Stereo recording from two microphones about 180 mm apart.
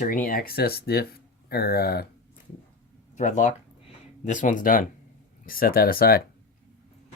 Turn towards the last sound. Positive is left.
turn(degrees=55)  # may be behind; listen again after turning